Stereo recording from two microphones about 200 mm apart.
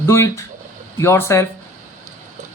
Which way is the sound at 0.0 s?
15° left (ahead or behind).